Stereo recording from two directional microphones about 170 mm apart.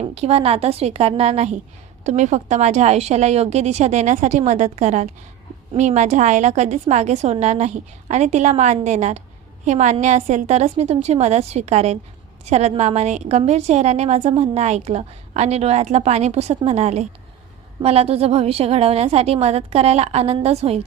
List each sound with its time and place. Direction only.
0.0 s a woman's voice: 35° right (ahead or behind)